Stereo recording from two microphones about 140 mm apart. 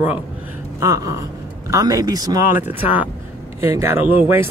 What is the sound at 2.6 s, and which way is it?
Speech, 10° right (ahead or behind).